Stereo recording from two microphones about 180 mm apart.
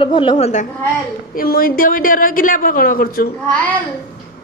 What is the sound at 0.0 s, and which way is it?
Speech, 25° left (ahead or behind).